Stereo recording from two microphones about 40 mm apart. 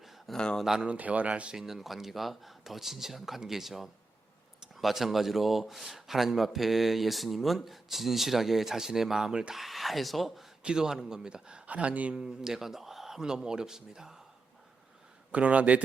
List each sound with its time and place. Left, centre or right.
0.3 s speech: centre
0.6 s speech: centre
0.9 s speech: right
1.5 s a man's voice: centre
9.6 s a man's voice: centre
10.6 s a man's voice: right
11.6 s speech: right
12.1 s speech: centre
15.3 s speech: right